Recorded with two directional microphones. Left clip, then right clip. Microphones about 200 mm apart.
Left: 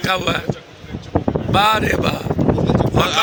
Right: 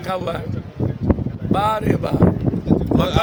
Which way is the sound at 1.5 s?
10° right (ahead or behind).